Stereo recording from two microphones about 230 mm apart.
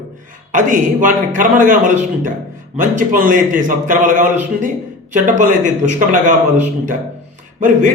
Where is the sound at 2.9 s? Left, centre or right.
Right.